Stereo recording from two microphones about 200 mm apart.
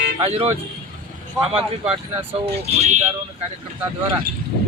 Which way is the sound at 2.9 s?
35° right (ahead or behind).